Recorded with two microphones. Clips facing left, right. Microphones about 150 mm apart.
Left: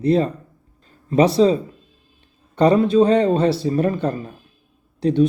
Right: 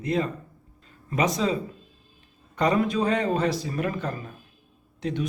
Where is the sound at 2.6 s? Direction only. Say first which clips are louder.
Left 9 dB; 30° left (ahead or behind).